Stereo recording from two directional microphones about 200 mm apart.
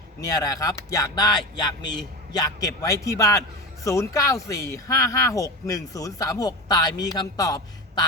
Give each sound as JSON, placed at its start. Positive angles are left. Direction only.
{"t": 0.2, "sound": "a man's voice", "side_deg": 20}